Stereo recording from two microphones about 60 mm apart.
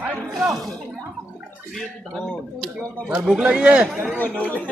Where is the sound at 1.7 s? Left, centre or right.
Centre.